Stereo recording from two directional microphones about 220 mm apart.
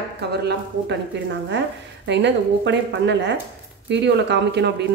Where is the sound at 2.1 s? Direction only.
50° right (ahead or behind).